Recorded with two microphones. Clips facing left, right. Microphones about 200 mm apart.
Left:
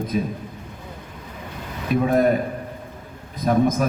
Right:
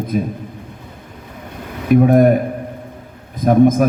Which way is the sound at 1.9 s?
55° right (ahead or behind).